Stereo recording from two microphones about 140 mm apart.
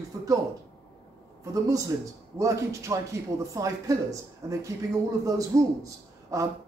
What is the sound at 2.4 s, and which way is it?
A man's voice, 20° right (ahead or behind).